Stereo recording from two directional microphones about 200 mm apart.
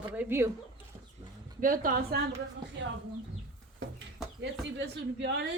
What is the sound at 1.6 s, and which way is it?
Speech, 45° right (ahead or behind).